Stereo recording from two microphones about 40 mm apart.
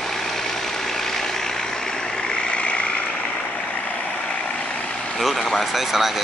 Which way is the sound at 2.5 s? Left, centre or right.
Left.